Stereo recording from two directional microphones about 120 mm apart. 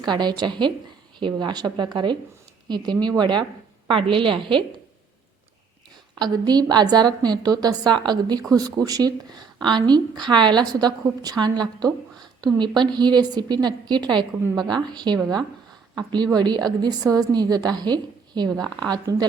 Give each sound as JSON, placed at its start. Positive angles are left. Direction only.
{"t": 0.0, "sound": "a woman's voice", "side_deg": -35}
{"t": 6.1, "sound": "a woman's voice", "side_deg": -35}
{"t": 18.4, "sound": "speech", "side_deg": 5}
{"t": 19.1, "sound": "a woman's voice", "side_deg": -30}